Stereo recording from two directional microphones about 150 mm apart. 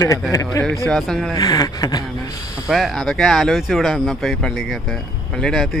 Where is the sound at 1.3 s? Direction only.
25° left (ahead or behind).